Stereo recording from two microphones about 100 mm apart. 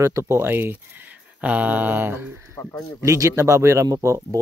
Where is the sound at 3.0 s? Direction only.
30° right (ahead or behind).